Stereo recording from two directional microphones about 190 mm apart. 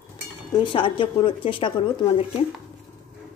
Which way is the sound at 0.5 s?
25° left (ahead or behind).